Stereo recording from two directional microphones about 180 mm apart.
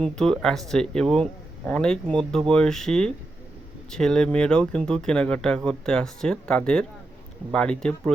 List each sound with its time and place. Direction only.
0.0 s speech: 5° left (ahead or behind)